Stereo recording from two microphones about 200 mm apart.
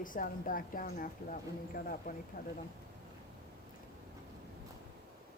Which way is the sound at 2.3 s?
50° left (ahead or behind).